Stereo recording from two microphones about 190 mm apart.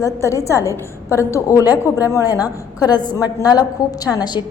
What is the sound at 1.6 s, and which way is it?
Speech, 10° right (ahead or behind).